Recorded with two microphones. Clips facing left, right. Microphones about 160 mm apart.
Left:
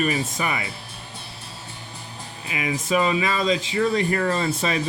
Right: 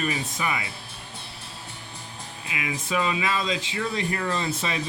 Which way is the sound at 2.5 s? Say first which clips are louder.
Left 5 dB; 40° left (ahead or behind).